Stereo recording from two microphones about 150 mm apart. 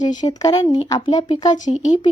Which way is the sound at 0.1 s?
25° left (ahead or behind).